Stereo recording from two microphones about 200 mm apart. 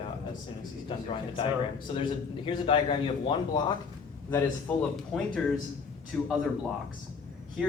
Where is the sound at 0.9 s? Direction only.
25° left (ahead or behind).